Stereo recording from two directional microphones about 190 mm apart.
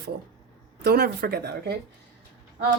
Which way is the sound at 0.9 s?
55° right (ahead or behind).